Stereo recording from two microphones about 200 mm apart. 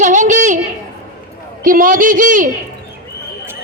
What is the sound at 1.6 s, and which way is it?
Speech, 40° right (ahead or behind).